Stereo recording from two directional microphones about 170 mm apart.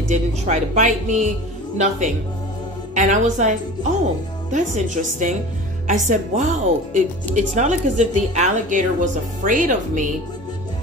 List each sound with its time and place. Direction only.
0.1 s a woman's voice: 45° right (ahead or behind)